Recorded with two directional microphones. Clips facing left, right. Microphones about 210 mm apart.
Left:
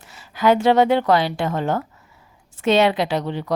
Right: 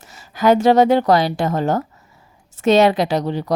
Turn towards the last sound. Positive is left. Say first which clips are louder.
# right 3 dB
turn(degrees=-40)  # may be behind; listen again after turning